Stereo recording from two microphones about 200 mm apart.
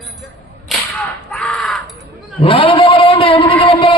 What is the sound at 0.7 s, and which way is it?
Whip, centre (ahead or behind).